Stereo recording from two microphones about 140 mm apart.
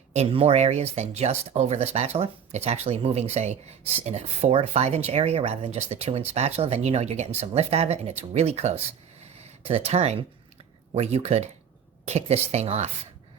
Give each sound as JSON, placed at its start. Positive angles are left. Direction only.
{"t": 0.1, "sound": "speech", "side_deg": -45}